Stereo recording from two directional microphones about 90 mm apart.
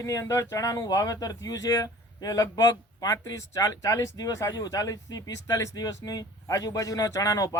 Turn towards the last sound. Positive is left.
turn(degrees=35)  # may be behind; listen again after turning